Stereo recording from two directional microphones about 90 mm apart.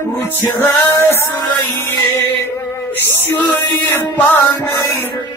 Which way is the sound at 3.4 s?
20° left (ahead or behind).